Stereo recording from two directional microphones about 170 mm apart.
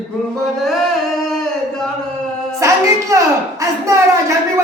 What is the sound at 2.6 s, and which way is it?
A woman's voice, 20° right (ahead or behind).